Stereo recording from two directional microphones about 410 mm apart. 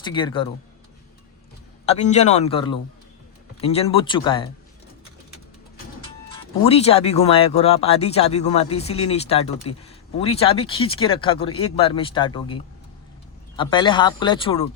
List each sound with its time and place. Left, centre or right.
0.0 s speech: centre
1.9 s speech: centre
6.7 s speech: centre
13.6 s speech: centre